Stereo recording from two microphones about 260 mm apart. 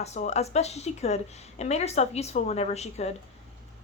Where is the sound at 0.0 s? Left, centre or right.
Left.